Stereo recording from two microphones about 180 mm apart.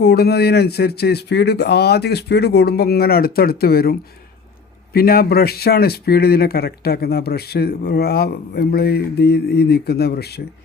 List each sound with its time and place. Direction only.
0.0 s speech: 65° left (ahead or behind)
4.9 s speech: 60° left (ahead or behind)